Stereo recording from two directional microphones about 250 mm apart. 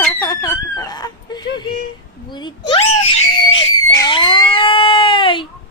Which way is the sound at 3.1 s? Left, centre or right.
Left.